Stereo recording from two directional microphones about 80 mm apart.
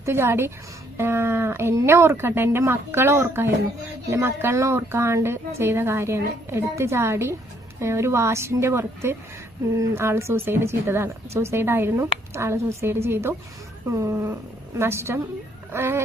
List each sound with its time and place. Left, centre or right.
0.0 s a woman's voice: right